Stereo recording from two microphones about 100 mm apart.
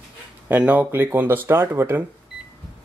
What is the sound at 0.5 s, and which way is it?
Speech, 15° right (ahead or behind).